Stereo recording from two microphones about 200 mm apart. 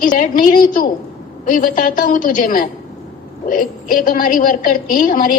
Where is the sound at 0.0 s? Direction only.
40° left (ahead or behind).